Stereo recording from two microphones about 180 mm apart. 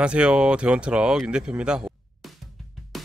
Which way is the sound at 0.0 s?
5° right (ahead or behind).